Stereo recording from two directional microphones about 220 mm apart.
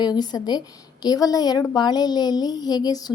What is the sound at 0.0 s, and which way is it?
A woman's voice, 20° left (ahead or behind).